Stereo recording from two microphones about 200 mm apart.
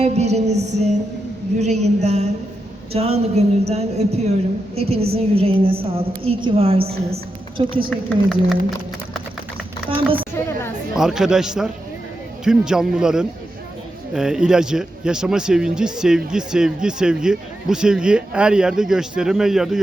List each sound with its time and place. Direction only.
0.0 s a woman's voice: 35° right (ahead or behind)
7.9 s a man's voice: centre (ahead or behind)
10.9 s a man's voice: centre (ahead or behind)